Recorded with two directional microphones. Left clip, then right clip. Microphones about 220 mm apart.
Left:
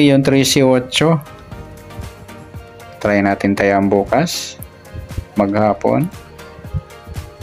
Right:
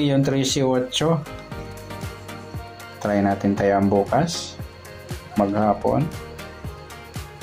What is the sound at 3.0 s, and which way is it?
Speech, 30° left (ahead or behind).